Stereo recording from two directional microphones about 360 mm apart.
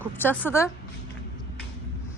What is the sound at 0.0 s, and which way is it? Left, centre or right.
Speech, centre.